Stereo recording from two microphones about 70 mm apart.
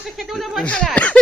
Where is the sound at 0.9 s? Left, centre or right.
Centre.